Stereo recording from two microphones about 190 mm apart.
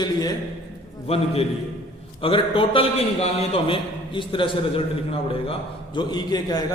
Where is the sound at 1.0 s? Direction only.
30° left (ahead or behind).